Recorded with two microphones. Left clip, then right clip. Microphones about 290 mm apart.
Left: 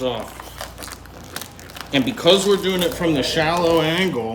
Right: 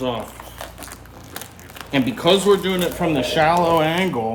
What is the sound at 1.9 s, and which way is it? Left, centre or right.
Speech, centre.